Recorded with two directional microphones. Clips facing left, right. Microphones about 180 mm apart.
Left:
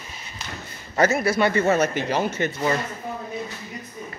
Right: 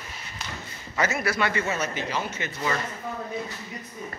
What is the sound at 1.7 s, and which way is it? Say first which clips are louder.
Speech: left 8 dB; 45° left (ahead or behind).